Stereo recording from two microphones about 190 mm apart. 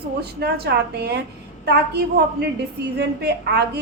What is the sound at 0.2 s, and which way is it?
A woman's voice, 55° right (ahead or behind).